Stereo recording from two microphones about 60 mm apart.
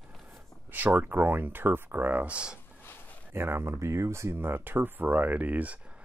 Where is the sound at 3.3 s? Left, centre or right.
Right.